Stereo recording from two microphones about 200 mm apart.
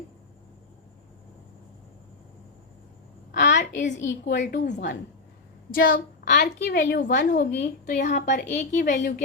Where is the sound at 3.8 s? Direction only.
40° left (ahead or behind).